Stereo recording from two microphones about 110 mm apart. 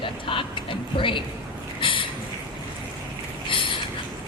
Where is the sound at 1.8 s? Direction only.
50° left (ahead or behind).